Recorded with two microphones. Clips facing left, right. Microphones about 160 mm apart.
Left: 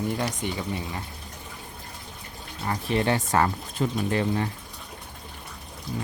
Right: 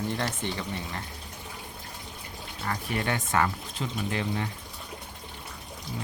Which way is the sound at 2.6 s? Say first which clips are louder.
Left 5 dB; 25° left (ahead or behind).